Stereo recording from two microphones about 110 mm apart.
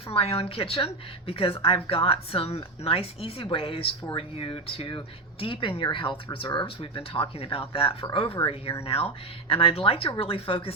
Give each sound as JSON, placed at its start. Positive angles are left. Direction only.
{"t": 0.1, "sound": "speech", "side_deg": 60}